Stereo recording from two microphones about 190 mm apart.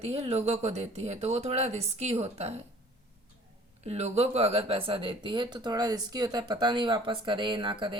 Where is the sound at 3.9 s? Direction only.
35° right (ahead or behind).